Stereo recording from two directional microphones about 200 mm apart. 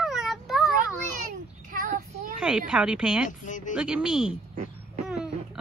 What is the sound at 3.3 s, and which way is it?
Speech, 40° left (ahead or behind).